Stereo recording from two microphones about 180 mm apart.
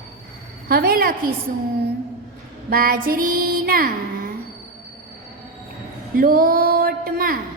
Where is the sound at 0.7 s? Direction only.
60° right (ahead or behind).